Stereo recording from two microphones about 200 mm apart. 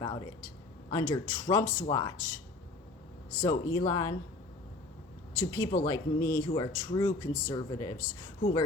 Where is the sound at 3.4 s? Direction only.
20° left (ahead or behind).